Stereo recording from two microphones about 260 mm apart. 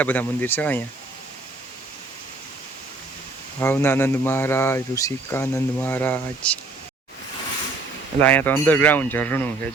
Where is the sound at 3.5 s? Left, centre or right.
Centre.